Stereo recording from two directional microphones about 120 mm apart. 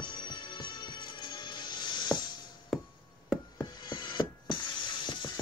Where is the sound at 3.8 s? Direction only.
40° left (ahead or behind).